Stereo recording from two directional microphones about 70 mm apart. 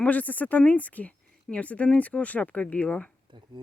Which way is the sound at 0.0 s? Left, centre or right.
Left.